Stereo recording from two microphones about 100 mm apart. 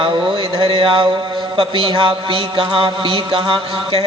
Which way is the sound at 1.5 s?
65° right (ahead or behind).